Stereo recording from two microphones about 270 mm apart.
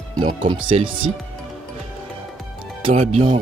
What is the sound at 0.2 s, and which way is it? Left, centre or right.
Speech, right.